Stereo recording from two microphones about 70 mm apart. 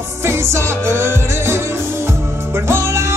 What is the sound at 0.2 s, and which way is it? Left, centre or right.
Music, right.